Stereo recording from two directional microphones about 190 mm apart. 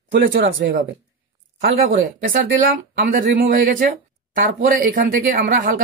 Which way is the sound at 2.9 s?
55° right (ahead or behind).